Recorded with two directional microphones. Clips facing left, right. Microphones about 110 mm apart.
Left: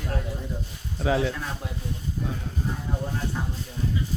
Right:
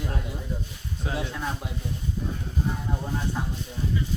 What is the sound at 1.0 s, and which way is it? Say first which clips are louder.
Speech: left 8 dB; 90° left.